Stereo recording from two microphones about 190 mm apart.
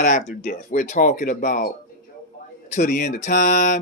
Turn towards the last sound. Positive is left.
turn(degrees=40)  # may be behind; listen again after turning